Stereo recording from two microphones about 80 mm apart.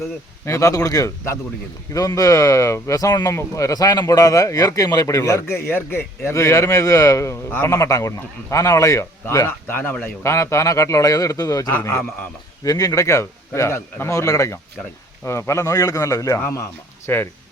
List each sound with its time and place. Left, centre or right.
0.4 s speech: left
3.3 s a man's voice: left
9.5 s speech: left
10.2 s speech: left
11.7 s speech: left
12.6 s a man's voice: left
17.1 s speech: left